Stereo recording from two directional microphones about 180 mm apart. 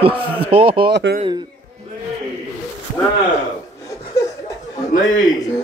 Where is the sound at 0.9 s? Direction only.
70° right (ahead or behind).